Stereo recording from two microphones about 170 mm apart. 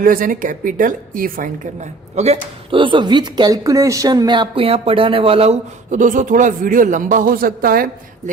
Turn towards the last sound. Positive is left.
turn(degrees=-55)  # may be behind; listen again after turning